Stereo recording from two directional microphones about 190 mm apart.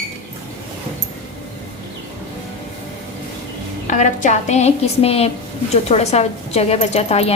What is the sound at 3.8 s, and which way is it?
A woman's voice, 40° left (ahead or behind).